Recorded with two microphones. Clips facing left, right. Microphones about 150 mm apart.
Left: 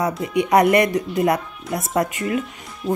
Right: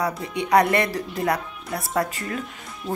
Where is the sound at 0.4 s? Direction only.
20° left (ahead or behind).